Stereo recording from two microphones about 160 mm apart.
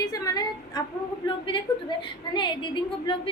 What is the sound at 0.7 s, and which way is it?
A woman's voice, 25° left (ahead or behind).